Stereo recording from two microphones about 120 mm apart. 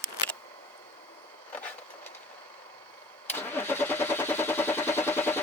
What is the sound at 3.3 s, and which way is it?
Vehicle, 15° left (ahead or behind).